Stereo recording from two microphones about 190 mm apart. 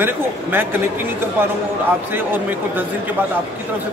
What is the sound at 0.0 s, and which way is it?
Speech, 10° right (ahead or behind).